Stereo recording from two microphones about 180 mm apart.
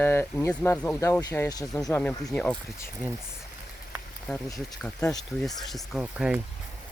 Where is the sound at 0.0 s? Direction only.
15° left (ahead or behind).